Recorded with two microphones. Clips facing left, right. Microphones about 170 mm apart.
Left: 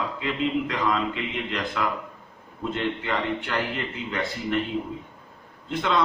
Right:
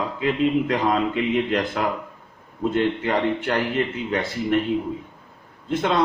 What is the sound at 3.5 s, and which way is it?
Speech, 45° right (ahead or behind).